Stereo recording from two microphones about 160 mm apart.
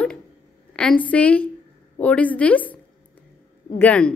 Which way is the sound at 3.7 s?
10° left (ahead or behind).